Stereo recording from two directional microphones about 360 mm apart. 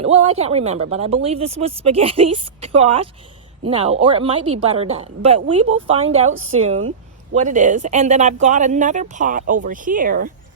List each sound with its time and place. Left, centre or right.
0.0 s speech: centre